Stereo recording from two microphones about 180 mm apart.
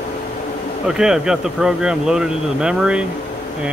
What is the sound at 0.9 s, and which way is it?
Speech, 5° right (ahead or behind).